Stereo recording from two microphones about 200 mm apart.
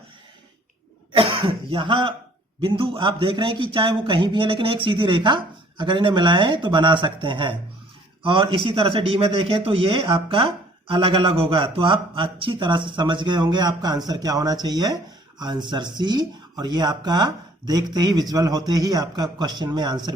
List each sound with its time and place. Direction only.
1.1 s a man's voice: 25° right (ahead or behind)